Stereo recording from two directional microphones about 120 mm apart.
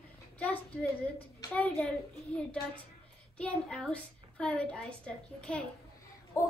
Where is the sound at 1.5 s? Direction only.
10° left (ahead or behind).